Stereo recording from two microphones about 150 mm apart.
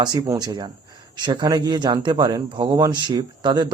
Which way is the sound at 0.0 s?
25° right (ahead or behind).